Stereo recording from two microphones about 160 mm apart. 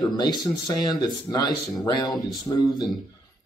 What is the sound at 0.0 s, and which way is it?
Speech, 25° left (ahead or behind).